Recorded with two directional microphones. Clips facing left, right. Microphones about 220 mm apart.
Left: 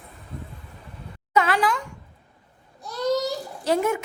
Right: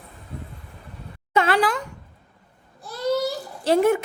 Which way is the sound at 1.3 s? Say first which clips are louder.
Right 1 dB; 30° right (ahead or behind).